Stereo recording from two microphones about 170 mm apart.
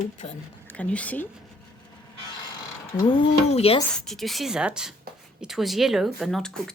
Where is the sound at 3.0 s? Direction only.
25° left (ahead or behind).